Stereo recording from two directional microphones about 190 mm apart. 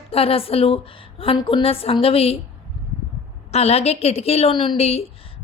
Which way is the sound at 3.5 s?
35° left (ahead or behind).